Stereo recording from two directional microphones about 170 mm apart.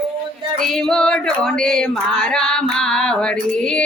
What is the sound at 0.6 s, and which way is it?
Female singing, centre (ahead or behind).